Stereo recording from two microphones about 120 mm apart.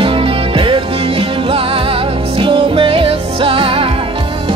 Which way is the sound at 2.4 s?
50° right (ahead or behind).